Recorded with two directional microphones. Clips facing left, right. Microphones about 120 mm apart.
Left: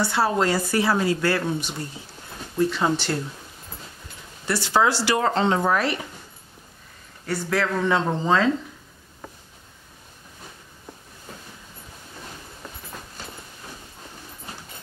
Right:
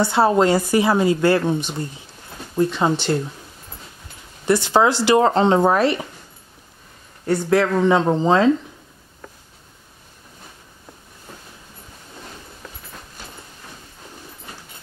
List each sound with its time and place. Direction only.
0.0 s speech: 25° right (ahead or behind)
4.5 s speech: 20° right (ahead or behind)
7.2 s speech: 20° right (ahead or behind)